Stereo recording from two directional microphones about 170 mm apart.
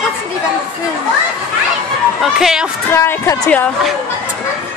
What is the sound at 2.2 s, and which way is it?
Speech, centre (ahead or behind).